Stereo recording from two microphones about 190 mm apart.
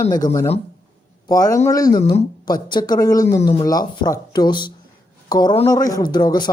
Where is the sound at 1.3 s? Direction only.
20° left (ahead or behind).